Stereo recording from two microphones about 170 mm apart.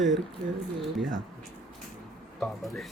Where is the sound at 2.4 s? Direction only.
Centre (ahead or behind).